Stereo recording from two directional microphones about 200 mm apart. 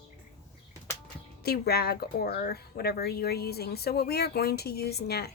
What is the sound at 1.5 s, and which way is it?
Speech, 50° left (ahead or behind).